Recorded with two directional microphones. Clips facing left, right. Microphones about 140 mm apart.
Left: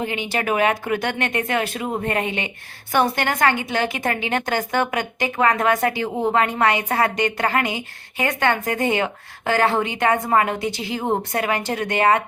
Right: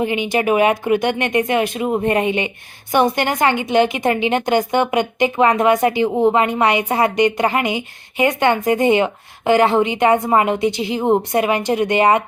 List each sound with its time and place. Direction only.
0.0 s a woman's voice: 15° right (ahead or behind)